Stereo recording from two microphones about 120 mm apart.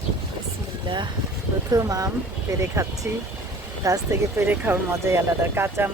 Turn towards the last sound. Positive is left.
turn(degrees=-20)  # may be behind; listen again after turning